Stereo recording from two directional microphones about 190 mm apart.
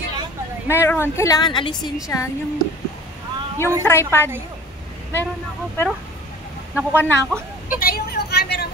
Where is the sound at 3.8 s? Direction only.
10° left (ahead or behind).